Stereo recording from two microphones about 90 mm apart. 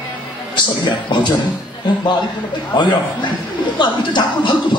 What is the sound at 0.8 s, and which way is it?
Speech, 60° left (ahead or behind).